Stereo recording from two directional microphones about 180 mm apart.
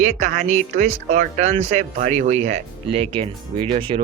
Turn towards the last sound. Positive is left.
turn(degrees=-30)  # may be behind; listen again after turning